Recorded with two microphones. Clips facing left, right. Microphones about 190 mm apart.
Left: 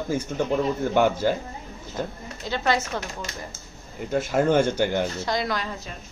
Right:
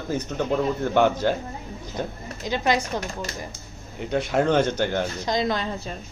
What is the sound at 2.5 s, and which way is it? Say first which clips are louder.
Speech: right 1 dB; 15° right (ahead or behind).